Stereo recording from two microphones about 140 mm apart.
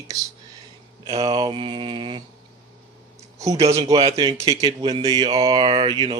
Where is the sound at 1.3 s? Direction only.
35° right (ahead or behind).